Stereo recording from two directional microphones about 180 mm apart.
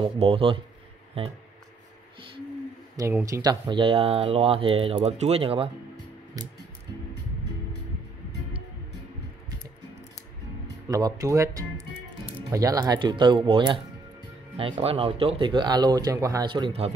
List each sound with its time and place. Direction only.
0.0 s speech: 30° right (ahead or behind)
3.3 s speech: 20° right (ahead or behind)
6.4 s speech: 20° right (ahead or behind)
10.9 s speech: 20° right (ahead or behind)